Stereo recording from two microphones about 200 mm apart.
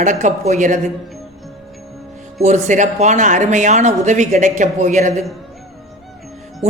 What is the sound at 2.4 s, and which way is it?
Speech, 35° right (ahead or behind).